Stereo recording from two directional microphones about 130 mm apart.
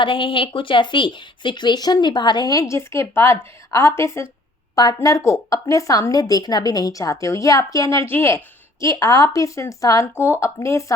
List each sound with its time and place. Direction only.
0.0 s speech: 40° left (ahead or behind); by 10.9 s 25° left (ahead or behind)